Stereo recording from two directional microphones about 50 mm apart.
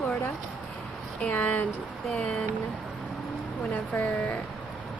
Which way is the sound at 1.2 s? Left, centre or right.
Left.